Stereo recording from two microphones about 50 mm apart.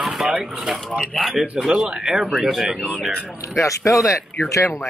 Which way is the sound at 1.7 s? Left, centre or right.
Centre.